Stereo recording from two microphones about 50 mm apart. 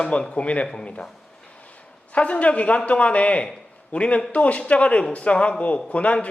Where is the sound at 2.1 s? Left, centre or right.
Left.